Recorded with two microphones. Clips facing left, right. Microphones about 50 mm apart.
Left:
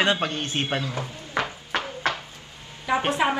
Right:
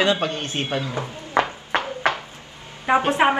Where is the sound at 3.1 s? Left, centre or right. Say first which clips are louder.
Right 4 dB; right.